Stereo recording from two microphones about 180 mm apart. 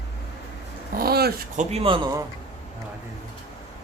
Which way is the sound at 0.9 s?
60° right (ahead or behind).